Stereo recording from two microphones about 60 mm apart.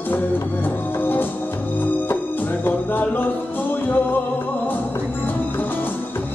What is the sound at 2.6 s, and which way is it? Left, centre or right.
Music, left.